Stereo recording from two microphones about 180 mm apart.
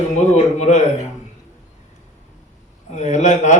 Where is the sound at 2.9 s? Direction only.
40° left (ahead or behind).